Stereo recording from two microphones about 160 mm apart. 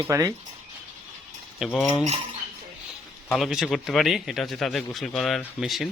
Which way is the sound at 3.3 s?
Centre (ahead or behind).